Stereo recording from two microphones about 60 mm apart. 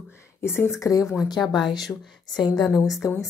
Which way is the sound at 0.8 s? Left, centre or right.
Left.